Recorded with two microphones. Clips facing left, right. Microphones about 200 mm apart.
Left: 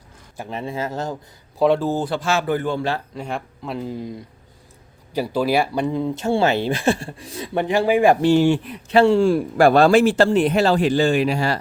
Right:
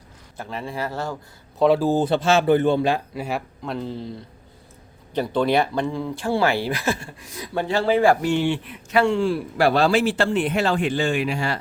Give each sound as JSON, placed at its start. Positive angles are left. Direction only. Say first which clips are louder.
{"t": 0.3, "sound": "speech", "louder": "left 2 dB", "side_deg": 20}
{"t": 1.5, "sound": "speech", "louder": "even", "side_deg": 0}
{"t": 1.9, "sound": "a man's voice", "louder": "right 3 dB", "side_deg": -20}
{"t": 5.1, "sound": "speech", "louder": "even", "side_deg": 5}
{"t": 8.2, "sound": "a man's voice", "louder": "left 6 dB", "side_deg": 40}